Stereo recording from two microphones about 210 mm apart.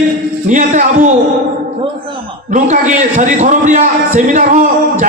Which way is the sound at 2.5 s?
35° right (ahead or behind).